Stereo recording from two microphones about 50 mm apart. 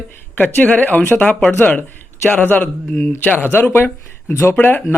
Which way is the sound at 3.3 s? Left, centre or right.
Left.